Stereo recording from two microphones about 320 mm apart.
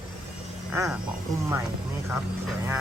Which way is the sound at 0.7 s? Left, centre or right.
Centre.